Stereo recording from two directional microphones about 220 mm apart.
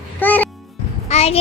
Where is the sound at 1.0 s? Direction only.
30° left (ahead or behind).